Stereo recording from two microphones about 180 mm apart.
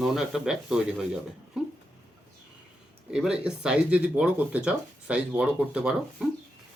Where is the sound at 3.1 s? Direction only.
5° right (ahead or behind).